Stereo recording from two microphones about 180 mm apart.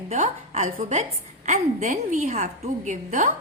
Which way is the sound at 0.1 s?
35° right (ahead or behind).